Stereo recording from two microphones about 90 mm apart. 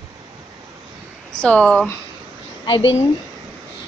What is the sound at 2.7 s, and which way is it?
Speech, 80° left.